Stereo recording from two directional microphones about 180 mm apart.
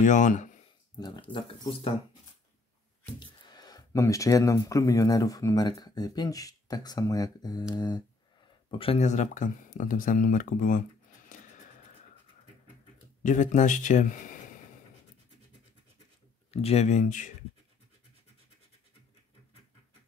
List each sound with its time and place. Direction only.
0.0 s speech: 45° left (ahead or behind)
0.9 s speech: 20° left (ahead or behind)
3.4 s speech: 20° left (ahead or behind); by 10.8 s 45° left (ahead or behind)
13.2 s speech: 45° left (ahead or behind)
16.4 s speech: 35° left (ahead or behind)